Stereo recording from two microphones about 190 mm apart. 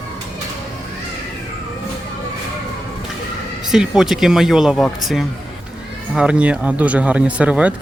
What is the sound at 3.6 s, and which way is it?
Speech, centre (ahead or behind).